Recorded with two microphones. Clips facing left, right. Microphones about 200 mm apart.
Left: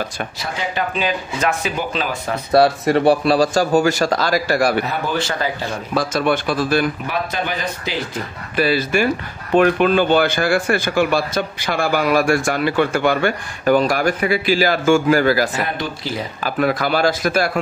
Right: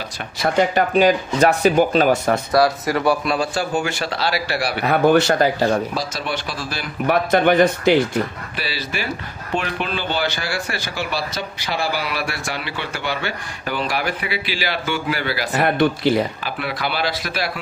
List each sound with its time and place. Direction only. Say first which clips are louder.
0.4 s speech: right 8 dB; 50° right (ahead or behind)
2.5 s speech: left 6 dB; 30° left (ahead or behind); by 4.7 s 45° left (ahead or behind)
4.8 s speech: right 8 dB; 65° right (ahead or behind)
5.3 s speech: right 6 dB; 50° right (ahead or behind)
5.9 s speech: left 7 dB; 50° left (ahead or behind)
7.1 s speech: right 7 dB; 60° right (ahead or behind)
8.5 s speech: left 11 dB; 50° left (ahead or behind)
15.6 s speech: right 8 dB; 60° right (ahead or behind)
16.4 s speech: left 7 dB; 45° left (ahead or behind)